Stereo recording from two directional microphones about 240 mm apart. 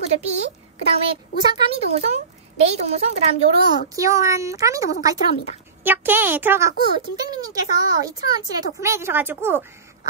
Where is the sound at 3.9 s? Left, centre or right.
Centre.